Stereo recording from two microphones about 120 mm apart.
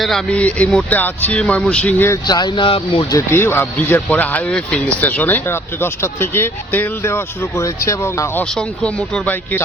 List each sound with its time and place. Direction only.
0.0 s speech: 5° left (ahead or behind)
2.2 s speech: 35° left (ahead or behind)
3.1 s speech: 20° left (ahead or behind)
8.5 s speech: 5° left (ahead or behind)